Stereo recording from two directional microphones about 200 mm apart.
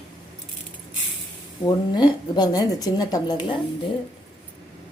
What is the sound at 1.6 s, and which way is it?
A woman's voice, 20° left (ahead or behind).